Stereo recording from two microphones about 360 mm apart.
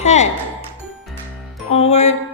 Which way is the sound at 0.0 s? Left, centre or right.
Centre.